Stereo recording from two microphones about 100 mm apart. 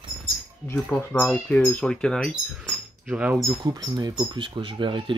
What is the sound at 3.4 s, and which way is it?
Speech, 40° right (ahead or behind).